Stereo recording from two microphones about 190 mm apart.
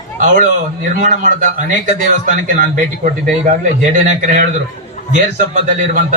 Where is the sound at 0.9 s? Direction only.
40° right (ahead or behind).